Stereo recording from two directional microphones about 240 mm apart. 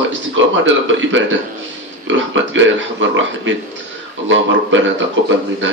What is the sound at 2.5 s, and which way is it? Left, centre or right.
A man's voice, right.